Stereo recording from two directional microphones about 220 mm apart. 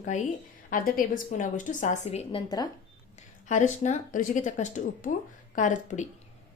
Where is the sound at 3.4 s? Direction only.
35° left (ahead or behind).